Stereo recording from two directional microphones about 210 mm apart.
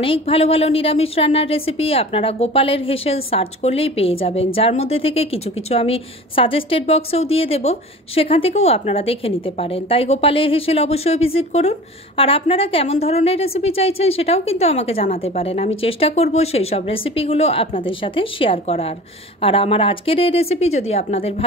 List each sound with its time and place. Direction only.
0.0 s a woman's voice: 25° left (ahead or behind)